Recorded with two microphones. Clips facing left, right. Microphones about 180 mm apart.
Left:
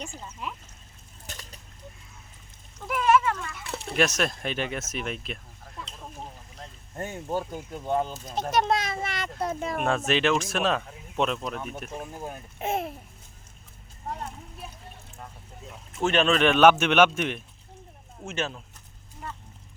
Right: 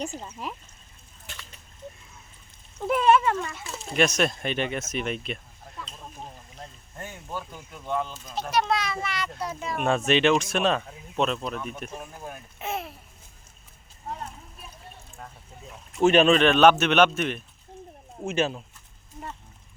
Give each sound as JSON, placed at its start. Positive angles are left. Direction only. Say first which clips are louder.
{"t": 0.0, "sound": "speech", "louder": "right 4 dB", "side_deg": -35}
{"t": 1.3, "sound": "a sound", "louder": "left 2 dB", "side_deg": 40}
{"t": 2.8, "sound": "speech", "louder": "right 2 dB", "side_deg": -30}
{"t": 3.9, "sound": "speech", "louder": "right 2 dB", "side_deg": 0}
{"t": 6.9, "sound": "speech", "louder": "left 7 dB", "side_deg": 35}
{"t": 10.1, "sound": "speech", "louder": "right 5 dB", "side_deg": 0}
{"t": 12.5, "sound": "speech", "louder": "left 4 dB", "side_deg": 50}
{"t": 16.0, "sound": "speech", "louder": "right 5 dB", "side_deg": -10}
{"t": 16.4, "sound": "a man's voice", "louder": "right 1 dB", "side_deg": 10}
{"t": 18.3, "sound": "speech", "louder": "right 6 dB", "side_deg": -15}